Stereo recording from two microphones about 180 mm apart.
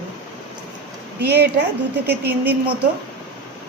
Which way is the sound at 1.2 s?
65° right (ahead or behind).